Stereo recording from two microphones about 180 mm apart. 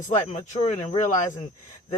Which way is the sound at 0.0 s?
45° left (ahead or behind).